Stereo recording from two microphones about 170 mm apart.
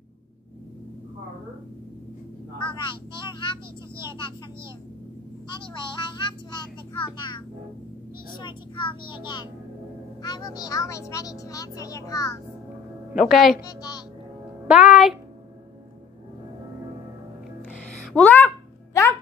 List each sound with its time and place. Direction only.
2.6 s speech: 25° left (ahead or behind)
6.1 s speech: 25° left (ahead or behind)
13.1 s a woman's voice: centre (ahead or behind)
13.6 s speech: 20° left (ahead or behind)
14.7 s a woman's voice: centre (ahead or behind)
18.1 s speech: 10° left (ahead or behind)